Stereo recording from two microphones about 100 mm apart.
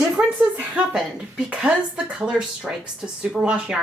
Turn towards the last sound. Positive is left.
turn(degrees=-10)  # may be behind; listen again after turning